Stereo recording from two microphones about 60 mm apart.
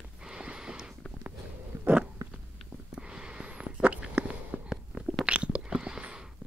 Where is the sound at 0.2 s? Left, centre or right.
Centre.